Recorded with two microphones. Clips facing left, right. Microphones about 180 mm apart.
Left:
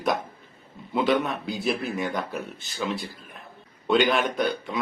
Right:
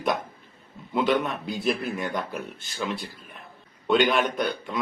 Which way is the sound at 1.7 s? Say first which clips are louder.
Even; 5° left (ahead or behind).